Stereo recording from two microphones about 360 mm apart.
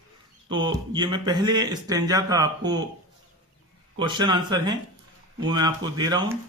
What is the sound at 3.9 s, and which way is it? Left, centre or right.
Speech, centre.